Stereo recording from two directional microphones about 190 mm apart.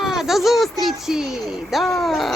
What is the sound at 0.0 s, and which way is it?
Speech, centre (ahead or behind).